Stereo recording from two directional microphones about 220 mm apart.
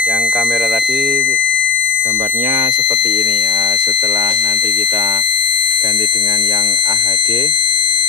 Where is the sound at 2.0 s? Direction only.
20° right (ahead or behind).